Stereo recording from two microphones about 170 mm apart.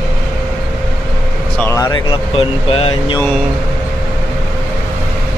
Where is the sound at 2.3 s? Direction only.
30° left (ahead or behind).